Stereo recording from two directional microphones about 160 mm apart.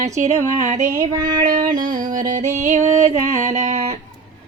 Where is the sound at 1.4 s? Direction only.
60° right (ahead or behind).